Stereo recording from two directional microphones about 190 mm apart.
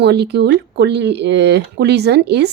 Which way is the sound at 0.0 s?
60° right (ahead or behind).